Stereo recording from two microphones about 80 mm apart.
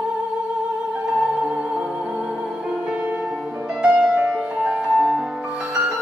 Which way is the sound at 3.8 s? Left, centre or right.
Centre.